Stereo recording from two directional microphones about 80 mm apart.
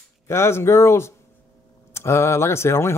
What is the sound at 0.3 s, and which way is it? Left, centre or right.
Speech, left.